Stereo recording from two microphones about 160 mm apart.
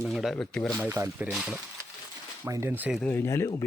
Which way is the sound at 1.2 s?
Centre (ahead or behind).